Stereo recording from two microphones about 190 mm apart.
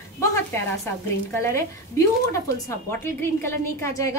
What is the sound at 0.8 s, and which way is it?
A woman's voice, 15° left (ahead or behind).